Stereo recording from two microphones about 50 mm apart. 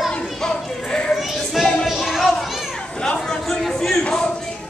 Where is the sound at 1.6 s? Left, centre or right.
Centre.